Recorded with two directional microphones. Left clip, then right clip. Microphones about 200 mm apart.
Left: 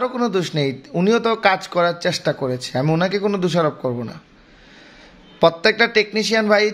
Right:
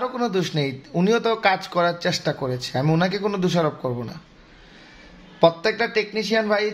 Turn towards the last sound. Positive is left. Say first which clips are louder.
# left 5 dB
turn(degrees=25)  # may be behind; listen again after turning